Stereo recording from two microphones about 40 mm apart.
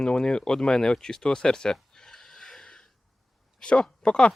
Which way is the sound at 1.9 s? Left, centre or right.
Centre.